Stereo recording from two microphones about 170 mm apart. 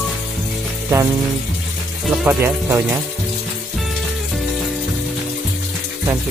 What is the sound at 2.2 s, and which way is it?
Speech, 10° right (ahead or behind).